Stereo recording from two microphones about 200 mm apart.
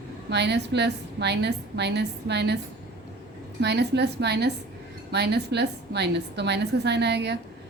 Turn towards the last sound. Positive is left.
turn(degrees=-55)  # may be behind; listen again after turning